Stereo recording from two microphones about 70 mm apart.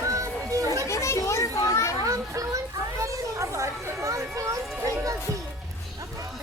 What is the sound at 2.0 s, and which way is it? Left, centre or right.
Children playing, right.